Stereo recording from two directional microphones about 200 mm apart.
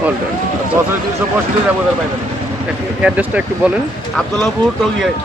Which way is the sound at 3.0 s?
5° right (ahead or behind).